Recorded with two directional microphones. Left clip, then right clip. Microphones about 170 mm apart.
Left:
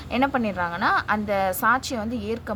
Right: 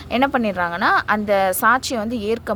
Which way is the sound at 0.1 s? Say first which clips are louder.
Right 5 dB; 40° right (ahead or behind).